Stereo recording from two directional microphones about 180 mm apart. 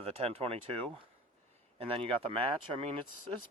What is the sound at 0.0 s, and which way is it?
Speech, 35° right (ahead or behind).